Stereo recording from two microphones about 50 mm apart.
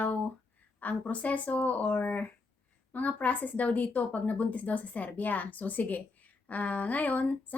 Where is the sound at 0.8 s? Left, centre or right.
Left.